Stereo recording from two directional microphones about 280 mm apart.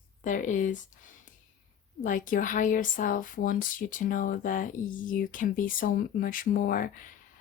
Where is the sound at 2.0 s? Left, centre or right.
Left.